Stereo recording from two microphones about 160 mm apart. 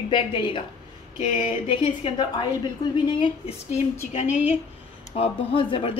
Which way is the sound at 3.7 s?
45° left (ahead or behind).